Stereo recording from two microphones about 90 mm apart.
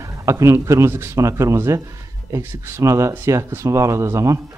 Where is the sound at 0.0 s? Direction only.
35° right (ahead or behind).